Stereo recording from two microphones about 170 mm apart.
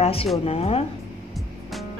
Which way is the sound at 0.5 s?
35° left (ahead or behind).